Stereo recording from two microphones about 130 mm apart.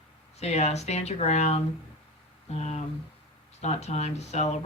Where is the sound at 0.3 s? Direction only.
55° left (ahead or behind).